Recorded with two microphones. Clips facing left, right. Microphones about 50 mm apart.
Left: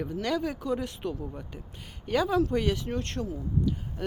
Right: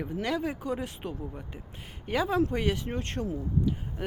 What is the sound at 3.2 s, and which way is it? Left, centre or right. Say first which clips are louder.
Speech: even; right.